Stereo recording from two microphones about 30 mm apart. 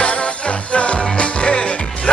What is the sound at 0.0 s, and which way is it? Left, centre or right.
Music, left.